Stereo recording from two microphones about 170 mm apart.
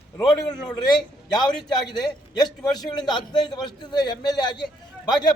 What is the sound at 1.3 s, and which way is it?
A man's voice, 25° left (ahead or behind).